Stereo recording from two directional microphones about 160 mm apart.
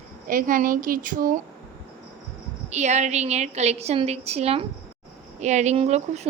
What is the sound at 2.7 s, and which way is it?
A woman's voice, 45° right (ahead or behind).